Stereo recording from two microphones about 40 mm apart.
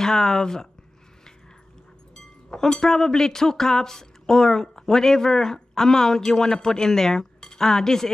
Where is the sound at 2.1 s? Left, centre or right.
Centre.